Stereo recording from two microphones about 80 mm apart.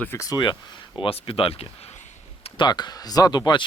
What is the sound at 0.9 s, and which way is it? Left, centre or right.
Speech, left.